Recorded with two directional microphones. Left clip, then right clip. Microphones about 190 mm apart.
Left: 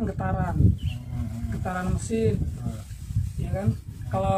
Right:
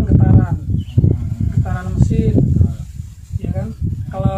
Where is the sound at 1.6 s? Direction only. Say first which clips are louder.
Right 2 dB; centre (ahead or behind).